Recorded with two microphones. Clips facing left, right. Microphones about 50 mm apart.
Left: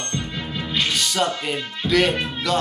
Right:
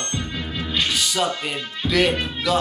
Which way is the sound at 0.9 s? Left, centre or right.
Centre.